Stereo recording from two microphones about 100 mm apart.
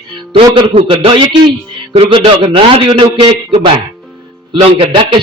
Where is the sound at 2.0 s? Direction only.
70° right (ahead or behind).